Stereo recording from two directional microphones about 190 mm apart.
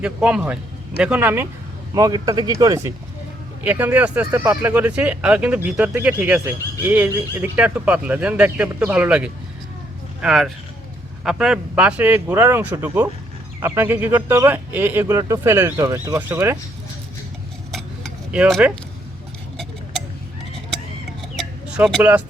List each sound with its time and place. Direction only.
0.0 s speech: 5° right (ahead or behind)
1.9 s speech: 20° right (ahead or behind)
3.6 s speech: 10° right (ahead or behind)
17.7 s keys jangling: centre (ahead or behind)
21.3 s a sound: centre (ahead or behind)